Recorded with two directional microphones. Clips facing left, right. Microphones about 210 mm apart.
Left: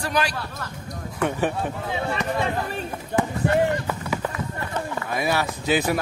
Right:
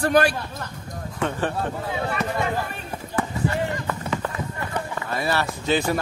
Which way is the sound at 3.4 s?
60° left (ahead or behind).